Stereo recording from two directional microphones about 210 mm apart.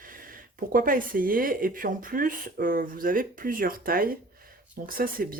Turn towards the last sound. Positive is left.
turn(degrees=-45)  # may be behind; listen again after turning